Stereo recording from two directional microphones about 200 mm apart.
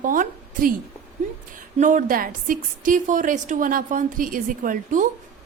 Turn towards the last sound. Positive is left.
turn(degrees=-40)  # may be behind; listen again after turning